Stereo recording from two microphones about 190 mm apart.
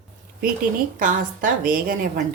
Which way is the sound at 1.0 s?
45° right (ahead or behind).